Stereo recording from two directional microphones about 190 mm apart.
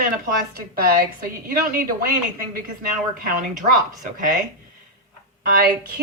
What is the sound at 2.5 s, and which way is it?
Speech, 50° right (ahead or behind).